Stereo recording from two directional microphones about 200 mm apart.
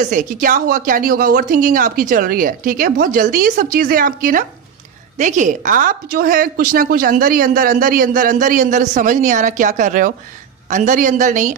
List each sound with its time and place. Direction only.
0.0 s a woman's voice: 40° right (ahead or behind)